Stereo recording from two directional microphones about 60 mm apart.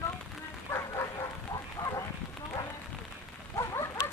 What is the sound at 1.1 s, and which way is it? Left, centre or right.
Bow-wow, left.